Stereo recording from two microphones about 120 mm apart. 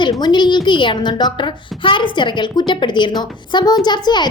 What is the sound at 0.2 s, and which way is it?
A woman's voice, 40° left (ahead or behind).